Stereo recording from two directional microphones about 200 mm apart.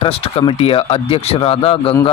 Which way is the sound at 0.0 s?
30° left (ahead or behind).